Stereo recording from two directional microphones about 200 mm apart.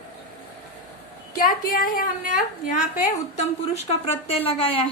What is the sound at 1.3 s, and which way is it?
A woman's voice, 45° left (ahead or behind).